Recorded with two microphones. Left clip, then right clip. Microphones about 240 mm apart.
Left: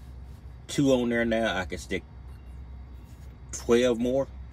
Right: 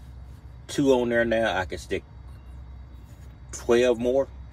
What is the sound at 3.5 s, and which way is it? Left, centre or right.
Speech, centre.